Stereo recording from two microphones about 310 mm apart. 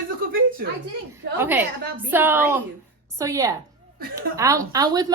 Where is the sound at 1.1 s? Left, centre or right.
Centre.